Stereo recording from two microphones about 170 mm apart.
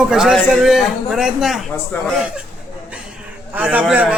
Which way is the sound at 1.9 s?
15° left (ahead or behind).